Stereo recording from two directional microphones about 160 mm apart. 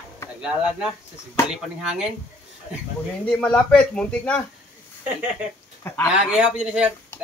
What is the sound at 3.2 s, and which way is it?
Speech, 10° left (ahead or behind).